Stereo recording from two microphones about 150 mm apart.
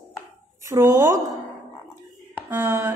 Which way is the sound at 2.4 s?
15° right (ahead or behind).